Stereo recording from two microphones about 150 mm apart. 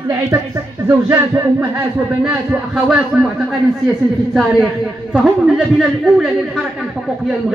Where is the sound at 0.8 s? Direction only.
15° right (ahead or behind).